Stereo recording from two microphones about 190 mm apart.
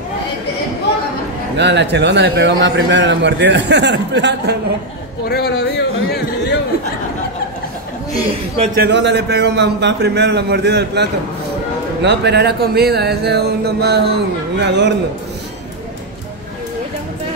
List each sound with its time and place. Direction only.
1.6 s a man's voice: 65° right (ahead or behind)
5.3 s speech: 60° left (ahead or behind)
8.1 s a woman's voice: 30° right (ahead or behind)
8.7 s a man's voice: 65° right (ahead or behind)